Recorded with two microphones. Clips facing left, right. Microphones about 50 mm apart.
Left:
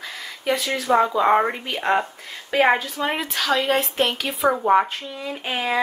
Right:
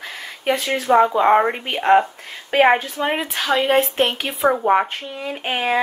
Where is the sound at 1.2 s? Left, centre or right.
Centre.